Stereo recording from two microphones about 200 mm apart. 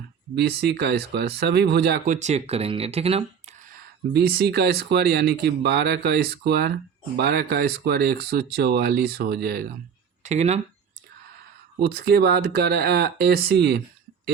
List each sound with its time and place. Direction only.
0.3 s speech: 55° right (ahead or behind)
2.1 s speech: 35° right (ahead or behind)
4.1 s speech: 50° right (ahead or behind)
10.2 s speech: 35° right (ahead or behind)
11.8 s speech: 50° right (ahead or behind)